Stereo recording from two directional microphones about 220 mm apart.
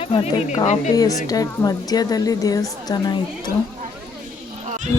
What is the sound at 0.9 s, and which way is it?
A woman's voice, 15° left (ahead or behind).